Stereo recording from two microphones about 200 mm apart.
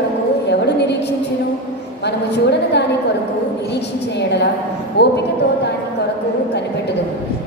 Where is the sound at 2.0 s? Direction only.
55° left (ahead or behind).